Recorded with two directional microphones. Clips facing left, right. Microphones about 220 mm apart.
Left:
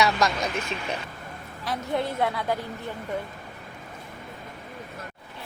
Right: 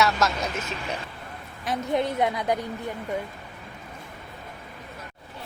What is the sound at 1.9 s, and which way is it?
Speech, 20° right (ahead or behind).